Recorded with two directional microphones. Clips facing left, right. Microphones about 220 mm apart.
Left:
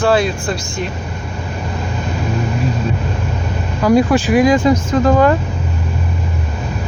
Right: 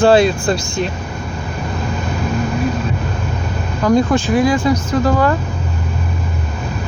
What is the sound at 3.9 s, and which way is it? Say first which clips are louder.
Speech: left 2 dB; 10° left (ahead or behind).